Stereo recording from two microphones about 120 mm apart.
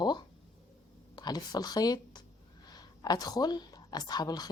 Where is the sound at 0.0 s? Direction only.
40° left (ahead or behind).